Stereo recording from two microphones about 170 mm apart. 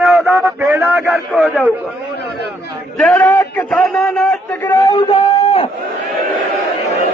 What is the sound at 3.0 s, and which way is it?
A man's voice, 10° left (ahead or behind).